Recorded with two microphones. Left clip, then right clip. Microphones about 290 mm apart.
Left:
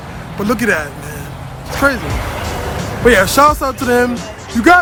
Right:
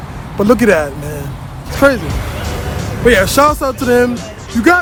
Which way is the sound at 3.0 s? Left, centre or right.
Centre.